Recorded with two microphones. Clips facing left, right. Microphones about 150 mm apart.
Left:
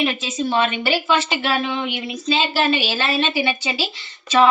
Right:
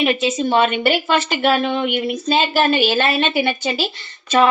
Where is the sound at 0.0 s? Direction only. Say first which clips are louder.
Right 4 dB; 70° right (ahead or behind).